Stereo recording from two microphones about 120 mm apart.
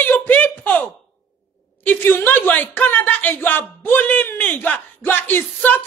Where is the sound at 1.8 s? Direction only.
15° left (ahead or behind).